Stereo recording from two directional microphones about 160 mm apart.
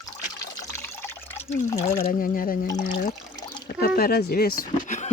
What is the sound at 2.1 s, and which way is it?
Speech, 60° left (ahead or behind).